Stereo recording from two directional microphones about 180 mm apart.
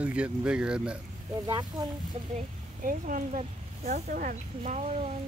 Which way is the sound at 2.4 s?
50° right (ahead or behind).